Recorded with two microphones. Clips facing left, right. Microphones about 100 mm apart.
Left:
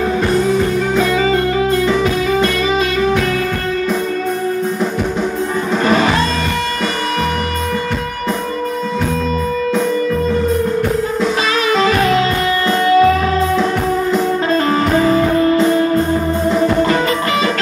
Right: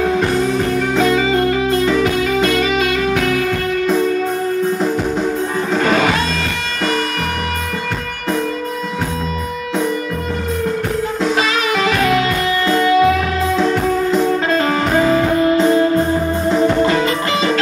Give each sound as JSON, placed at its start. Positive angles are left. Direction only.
{"t": 2.4, "sound": "music", "side_deg": 40}
{"t": 11.7, "sound": "music", "side_deg": 35}
{"t": 14.7, "sound": "music", "side_deg": 35}